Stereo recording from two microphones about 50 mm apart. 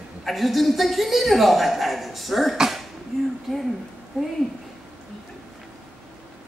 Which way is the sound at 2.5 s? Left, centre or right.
Centre.